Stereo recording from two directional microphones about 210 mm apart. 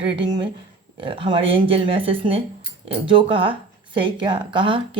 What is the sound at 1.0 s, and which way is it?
Speech, 25° right (ahead or behind).